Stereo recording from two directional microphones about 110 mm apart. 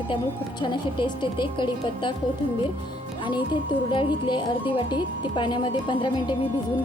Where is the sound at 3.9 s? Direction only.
50° left (ahead or behind).